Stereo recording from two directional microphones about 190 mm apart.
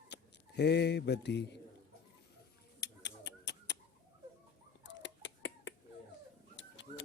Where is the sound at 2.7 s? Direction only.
65° left (ahead or behind).